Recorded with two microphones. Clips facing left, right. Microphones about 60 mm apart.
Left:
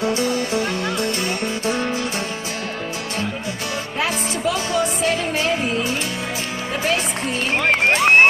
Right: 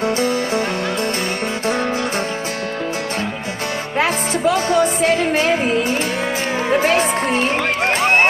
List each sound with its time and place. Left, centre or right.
0.0 s music: right
4.0 s music: right